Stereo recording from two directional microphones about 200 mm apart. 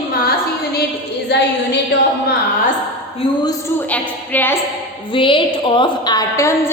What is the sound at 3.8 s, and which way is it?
Speech, 10° left (ahead or behind).